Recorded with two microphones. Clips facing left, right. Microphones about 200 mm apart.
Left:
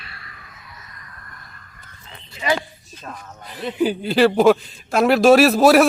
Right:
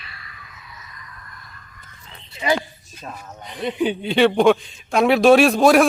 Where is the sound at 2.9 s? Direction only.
10° right (ahead or behind).